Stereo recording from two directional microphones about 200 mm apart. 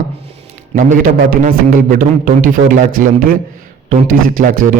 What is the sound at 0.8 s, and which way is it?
A man's voice, 40° right (ahead or behind).